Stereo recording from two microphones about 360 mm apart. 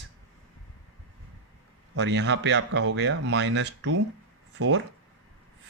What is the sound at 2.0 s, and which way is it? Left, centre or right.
Speech, right.